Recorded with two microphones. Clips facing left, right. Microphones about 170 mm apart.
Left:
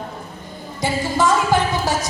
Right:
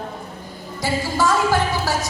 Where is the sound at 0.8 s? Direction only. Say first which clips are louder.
Left 2 dB; 20° left (ahead or behind).